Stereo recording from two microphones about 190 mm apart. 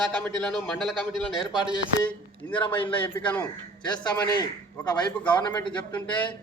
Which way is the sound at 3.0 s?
10° left (ahead or behind).